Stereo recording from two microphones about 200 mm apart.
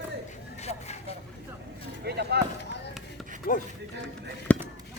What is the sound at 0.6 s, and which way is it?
Vehicle, 30° left (ahead or behind).